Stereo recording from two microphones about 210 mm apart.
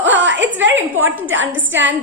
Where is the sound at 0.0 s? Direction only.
60° right (ahead or behind).